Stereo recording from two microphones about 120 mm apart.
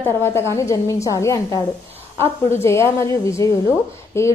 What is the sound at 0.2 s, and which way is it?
A woman's voice, 20° left (ahead or behind).